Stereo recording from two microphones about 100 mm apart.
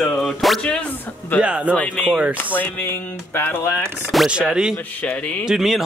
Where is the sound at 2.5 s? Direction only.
15° left (ahead or behind).